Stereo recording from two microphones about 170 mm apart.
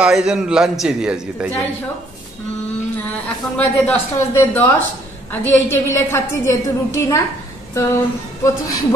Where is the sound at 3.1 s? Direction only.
10° left (ahead or behind).